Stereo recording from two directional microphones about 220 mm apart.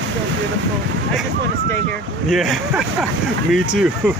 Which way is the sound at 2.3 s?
Centre (ahead or behind).